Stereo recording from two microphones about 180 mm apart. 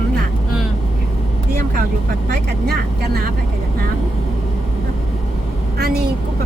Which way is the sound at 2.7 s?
60° right (ahead or behind).